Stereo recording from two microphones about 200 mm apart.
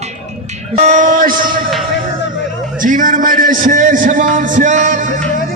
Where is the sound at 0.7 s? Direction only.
35° right (ahead or behind).